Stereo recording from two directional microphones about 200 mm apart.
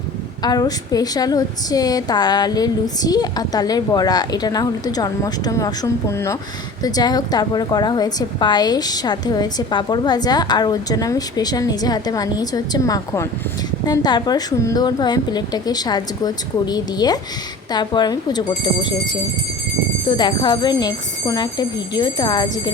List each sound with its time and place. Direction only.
0.4 s a woman's voice: 20° left (ahead or behind)
20.1 s a woman's voice: 20° left (ahead or behind)